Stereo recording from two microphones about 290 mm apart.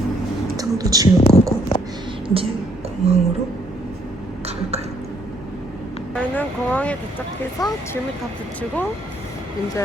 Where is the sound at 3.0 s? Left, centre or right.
Right.